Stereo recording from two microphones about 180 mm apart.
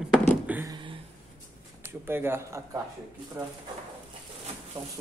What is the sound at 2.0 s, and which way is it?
Speech, 15° right (ahead or behind).